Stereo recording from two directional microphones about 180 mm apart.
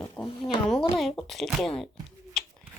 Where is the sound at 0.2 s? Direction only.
Centre (ahead or behind).